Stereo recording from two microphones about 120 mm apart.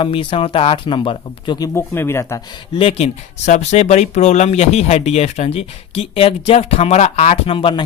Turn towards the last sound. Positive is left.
turn(degrees=45)  # may be behind; listen again after turning